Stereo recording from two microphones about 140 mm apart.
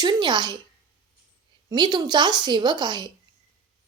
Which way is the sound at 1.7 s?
30° right (ahead or behind).